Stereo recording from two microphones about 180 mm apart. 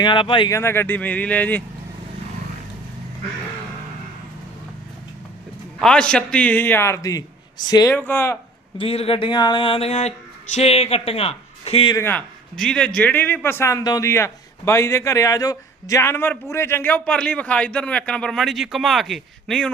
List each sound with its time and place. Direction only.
0.0 s speech: 25° left (ahead or behind)
0.5 s a man's voice: 15° left (ahead or behind)
5.8 s a man's voice: 5° left (ahead or behind); by 7.9 s 20° left (ahead or behind)
7.9 s a man's voice: 10° left (ahead or behind)
8.8 s a man's voice: 35° left (ahead or behind)
11.9 s a man's voice: 10° left (ahead or behind)